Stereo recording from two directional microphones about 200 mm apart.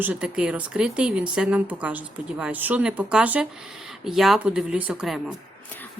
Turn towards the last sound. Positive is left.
turn(degrees=0)  # may be behind; listen again after turning